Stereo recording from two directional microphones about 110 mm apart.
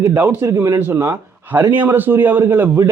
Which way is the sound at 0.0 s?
25° right (ahead or behind).